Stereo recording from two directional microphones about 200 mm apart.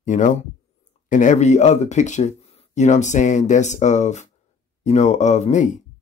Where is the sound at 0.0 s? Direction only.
40° left (ahead or behind).